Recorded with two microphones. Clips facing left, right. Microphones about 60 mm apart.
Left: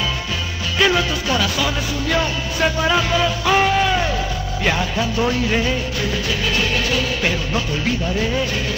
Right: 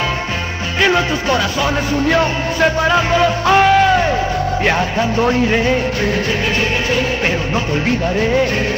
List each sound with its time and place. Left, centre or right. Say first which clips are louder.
0.7 s music: right 3 dB; right
7.5 s music: right 4 dB; right